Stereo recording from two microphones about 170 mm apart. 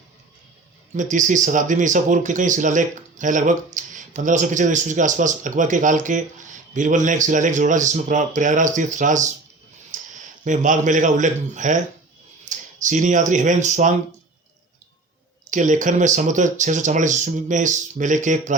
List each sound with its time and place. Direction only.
0.9 s speech: 45° right (ahead or behind)
9.9 s a sound: 50° right (ahead or behind)
10.4 s speech: 45° right (ahead or behind)
15.4 s speech: 50° right (ahead or behind)